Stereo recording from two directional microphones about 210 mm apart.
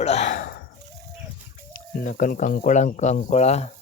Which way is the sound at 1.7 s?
40° left (ahead or behind).